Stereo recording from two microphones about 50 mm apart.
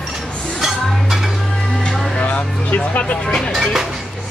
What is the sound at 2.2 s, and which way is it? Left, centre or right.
Speech, left.